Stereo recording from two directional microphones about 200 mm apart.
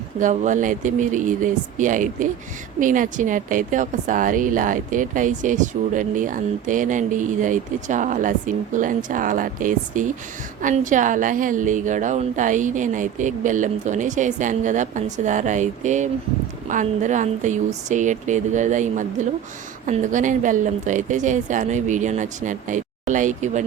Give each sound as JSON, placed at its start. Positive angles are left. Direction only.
{"t": 0.2, "sound": "a woman's voice", "side_deg": -40}